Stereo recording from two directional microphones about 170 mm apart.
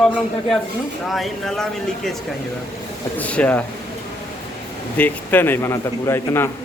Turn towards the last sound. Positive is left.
turn(degrees=15)  # may be behind; listen again after turning